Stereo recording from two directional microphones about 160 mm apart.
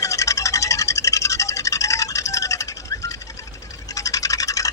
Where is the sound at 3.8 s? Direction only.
20° left (ahead or behind).